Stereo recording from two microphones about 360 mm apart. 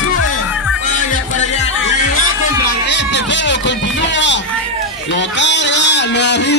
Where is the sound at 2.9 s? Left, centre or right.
Left.